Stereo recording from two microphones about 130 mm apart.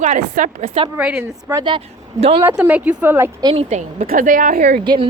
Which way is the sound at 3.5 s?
65° right (ahead or behind).